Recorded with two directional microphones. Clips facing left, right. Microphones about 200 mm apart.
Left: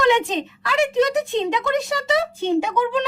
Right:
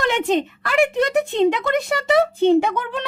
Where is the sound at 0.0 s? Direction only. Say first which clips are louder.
Left 1 dB; 55° right (ahead or behind).